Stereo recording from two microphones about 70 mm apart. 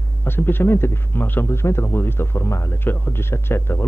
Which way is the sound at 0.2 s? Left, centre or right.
Left.